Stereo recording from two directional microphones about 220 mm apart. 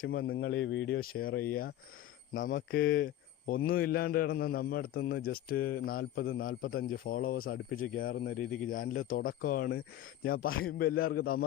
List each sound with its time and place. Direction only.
0.0 s a man's voice: 40° left (ahead or behind)
0.3 s a man's voice: 55° left (ahead or behind); by 1.3 s 40° left (ahead or behind)
2.3 s speech: 35° left (ahead or behind)
2.6 s speech: 55° left (ahead or behind)
2.8 s a man's voice: 40° left (ahead or behind)